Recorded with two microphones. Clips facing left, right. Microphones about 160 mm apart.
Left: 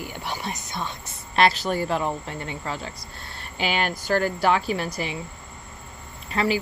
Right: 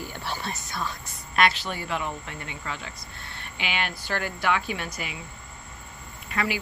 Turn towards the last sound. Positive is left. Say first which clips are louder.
# left 5 dB
turn(degrees=30)  # may be behind; listen again after turning